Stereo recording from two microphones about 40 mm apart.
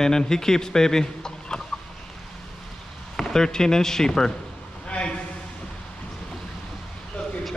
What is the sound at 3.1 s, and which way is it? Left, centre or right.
Speech, centre.